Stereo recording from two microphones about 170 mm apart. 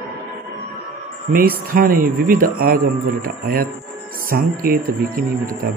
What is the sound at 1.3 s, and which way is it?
Speech, 60° right (ahead or behind).